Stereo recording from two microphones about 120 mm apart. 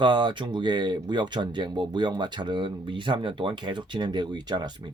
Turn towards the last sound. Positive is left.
turn(degrees=-40)  # may be behind; listen again after turning